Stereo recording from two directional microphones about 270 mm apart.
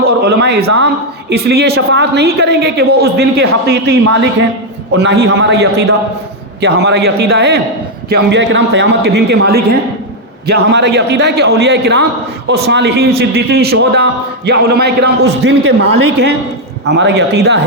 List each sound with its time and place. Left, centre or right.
0.0 s a man's voice: right
4.9 s a man's voice: right